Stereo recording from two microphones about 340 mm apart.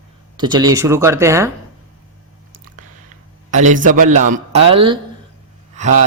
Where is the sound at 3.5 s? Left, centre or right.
Right.